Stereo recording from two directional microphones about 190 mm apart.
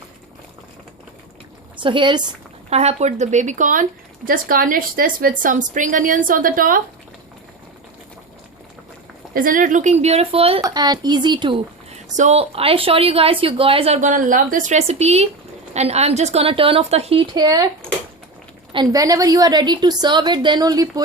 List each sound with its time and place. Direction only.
1.7 s a woman's voice: 25° right (ahead or behind); by 6.8 s 45° right (ahead or behind)
9.3 s a woman's voice: 45° right (ahead or behind); by 17.7 s 20° right (ahead or behind)
18.7 s a woman's voice: 20° right (ahead or behind)